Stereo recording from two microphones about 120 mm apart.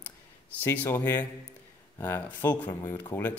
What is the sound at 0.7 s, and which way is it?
Speech, 20° left (ahead or behind).